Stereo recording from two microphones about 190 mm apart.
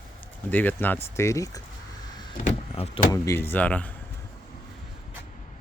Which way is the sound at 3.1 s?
15° left (ahead or behind).